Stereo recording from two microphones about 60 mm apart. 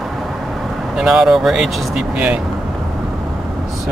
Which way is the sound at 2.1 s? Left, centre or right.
Right.